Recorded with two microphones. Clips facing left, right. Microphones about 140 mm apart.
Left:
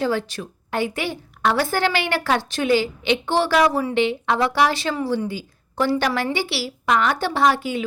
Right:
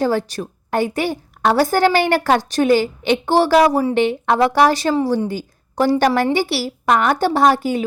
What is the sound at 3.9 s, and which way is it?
A woman's voice, 50° right (ahead or behind).